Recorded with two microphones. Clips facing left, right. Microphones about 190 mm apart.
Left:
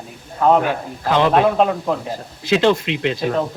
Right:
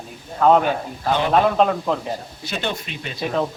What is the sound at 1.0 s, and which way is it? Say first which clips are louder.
Speech: left 5 dB; 90° left.